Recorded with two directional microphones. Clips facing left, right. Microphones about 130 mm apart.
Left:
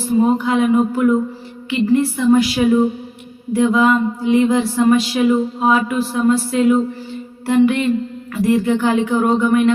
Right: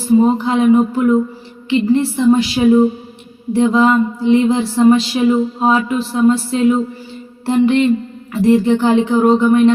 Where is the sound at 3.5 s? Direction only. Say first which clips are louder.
Right 2 dB; 30° right (ahead or behind).